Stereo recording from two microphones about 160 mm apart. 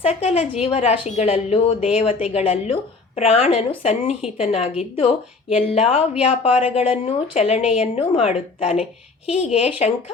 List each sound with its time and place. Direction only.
0.1 s a woman's voice: 40° left (ahead or behind)